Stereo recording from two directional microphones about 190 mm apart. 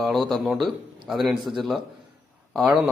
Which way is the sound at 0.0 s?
Centre (ahead or behind).